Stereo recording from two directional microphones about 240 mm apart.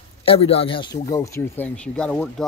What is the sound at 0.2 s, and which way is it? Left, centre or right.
Speech, left.